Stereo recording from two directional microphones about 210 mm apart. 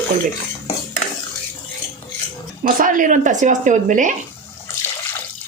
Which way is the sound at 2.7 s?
40° right (ahead or behind).